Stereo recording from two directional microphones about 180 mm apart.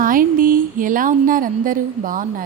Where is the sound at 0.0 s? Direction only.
50° right (ahead or behind).